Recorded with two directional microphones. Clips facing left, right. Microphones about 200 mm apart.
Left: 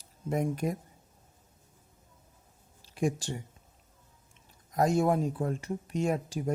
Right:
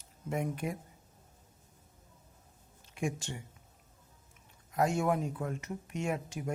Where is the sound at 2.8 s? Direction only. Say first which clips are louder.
Left 5 dB; 35° left (ahead or behind).